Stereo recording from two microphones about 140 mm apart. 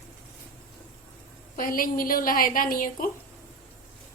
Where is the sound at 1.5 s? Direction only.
85° left.